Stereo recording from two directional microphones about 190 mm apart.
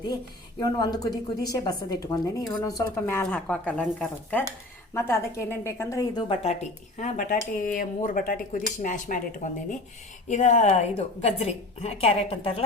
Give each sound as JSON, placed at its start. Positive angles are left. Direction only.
{"t": 0.6, "sound": "a woman's voice", "side_deg": 20}